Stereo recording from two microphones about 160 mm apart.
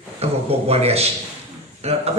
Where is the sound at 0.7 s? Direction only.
40° right (ahead or behind).